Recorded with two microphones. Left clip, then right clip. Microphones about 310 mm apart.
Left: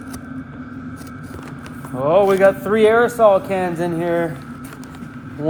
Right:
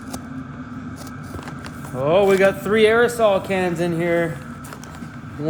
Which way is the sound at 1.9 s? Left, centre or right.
Centre.